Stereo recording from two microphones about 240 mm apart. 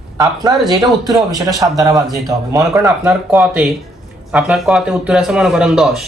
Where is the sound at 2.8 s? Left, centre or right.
Centre.